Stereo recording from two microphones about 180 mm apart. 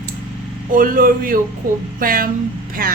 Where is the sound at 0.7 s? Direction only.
50° right (ahead or behind).